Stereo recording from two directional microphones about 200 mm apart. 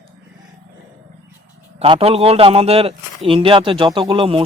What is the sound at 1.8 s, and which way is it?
A man's voice, 30° right (ahead or behind).